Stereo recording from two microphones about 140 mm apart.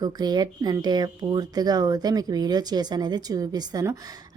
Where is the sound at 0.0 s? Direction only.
30° right (ahead or behind).